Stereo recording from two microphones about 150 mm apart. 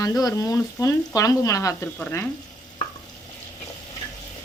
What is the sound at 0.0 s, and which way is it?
Speech, 25° left (ahead or behind).